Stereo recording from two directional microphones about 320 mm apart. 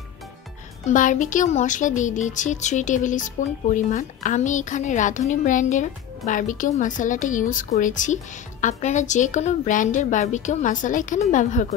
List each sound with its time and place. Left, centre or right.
0.8 s a woman's voice: left